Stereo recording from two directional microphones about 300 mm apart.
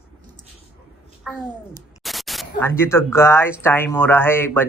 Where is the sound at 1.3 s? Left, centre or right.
Centre.